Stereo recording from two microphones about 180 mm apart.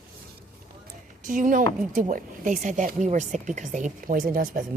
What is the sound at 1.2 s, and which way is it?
A woman's voice, 45° right (ahead or behind).